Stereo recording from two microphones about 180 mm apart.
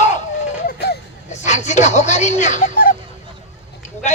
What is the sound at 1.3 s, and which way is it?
Speech, 40° left (ahead or behind).